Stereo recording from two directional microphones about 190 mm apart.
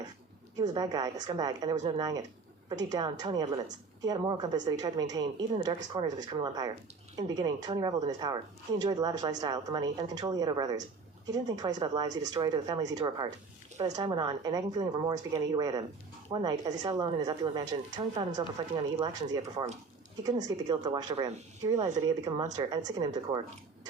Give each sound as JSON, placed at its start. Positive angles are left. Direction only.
{"t": 0.7, "sound": "speech", "side_deg": -20}
{"t": 19.4, "sound": "speech", "side_deg": -35}
{"t": 20.2, "sound": "speech", "side_deg": -20}